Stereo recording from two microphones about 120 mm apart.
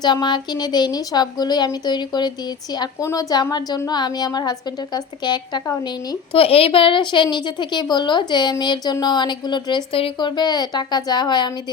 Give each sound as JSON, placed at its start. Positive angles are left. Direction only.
{"t": 0.0, "sound": "a woman's voice", "side_deg": 40}
{"t": 6.3, "sound": "a woman's voice", "side_deg": 50}